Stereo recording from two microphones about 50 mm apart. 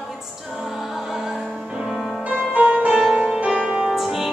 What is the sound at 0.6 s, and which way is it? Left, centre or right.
Music, centre.